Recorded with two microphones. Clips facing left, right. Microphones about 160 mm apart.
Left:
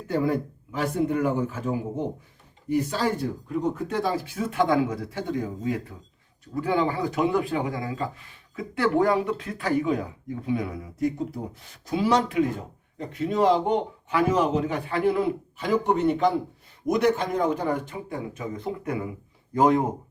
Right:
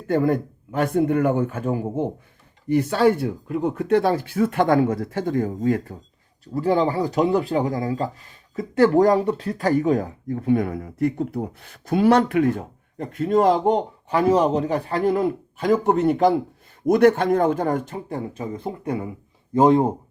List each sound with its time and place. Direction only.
0.1 s speech: 55° right (ahead or behind)
2.6 s speech: 65° right (ahead or behind); by 6.0 s 50° right (ahead or behind)
6.5 s speech: 35° right (ahead or behind)
18.3 s speech: 30° right (ahead or behind)